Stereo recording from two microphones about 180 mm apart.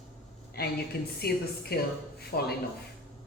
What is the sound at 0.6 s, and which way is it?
A woman's voice, 60° left (ahead or behind).